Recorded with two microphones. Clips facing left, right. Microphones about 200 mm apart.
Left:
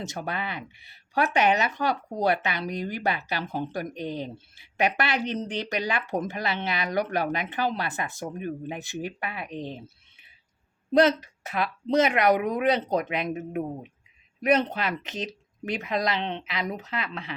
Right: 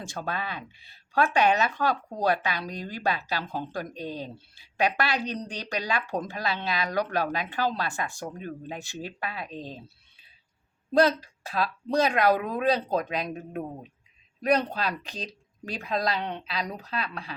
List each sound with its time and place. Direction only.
0.0 s speech: 20° left (ahead or behind)
9.6 s a sound: 20° left (ahead or behind)
10.9 s speech: 20° left (ahead or behind)